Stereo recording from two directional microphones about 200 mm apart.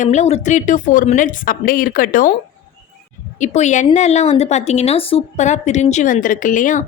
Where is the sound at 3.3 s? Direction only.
35° left (ahead or behind).